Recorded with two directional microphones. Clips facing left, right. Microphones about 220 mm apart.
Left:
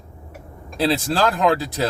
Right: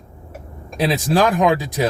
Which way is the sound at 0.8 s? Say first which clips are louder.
Right 2 dB; 15° right (ahead or behind).